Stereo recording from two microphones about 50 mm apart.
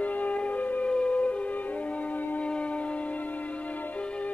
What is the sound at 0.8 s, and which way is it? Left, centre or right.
Music, left.